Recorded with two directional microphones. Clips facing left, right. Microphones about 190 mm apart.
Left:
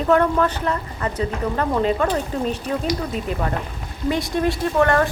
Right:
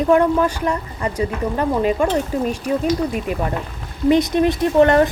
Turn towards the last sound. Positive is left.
turn(degrees=-20)  # may be behind; listen again after turning